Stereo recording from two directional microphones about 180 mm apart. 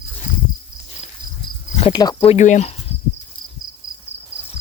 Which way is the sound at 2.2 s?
40° left (ahead or behind).